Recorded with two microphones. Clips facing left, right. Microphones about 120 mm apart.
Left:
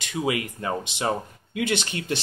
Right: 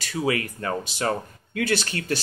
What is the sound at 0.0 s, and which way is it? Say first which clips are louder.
Speech: right 1 dB; 20° left (ahead or behind).